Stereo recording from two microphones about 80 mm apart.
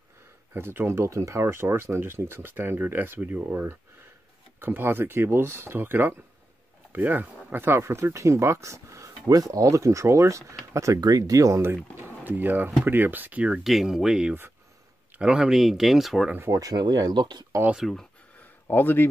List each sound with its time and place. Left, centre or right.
0.5 s speech: right
9.3 s speech: right
11.0 s speech: right
11.7 s speech: right
13.7 s speech: centre
16.5 s speech: right
17.7 s speech: centre
18.7 s speech: left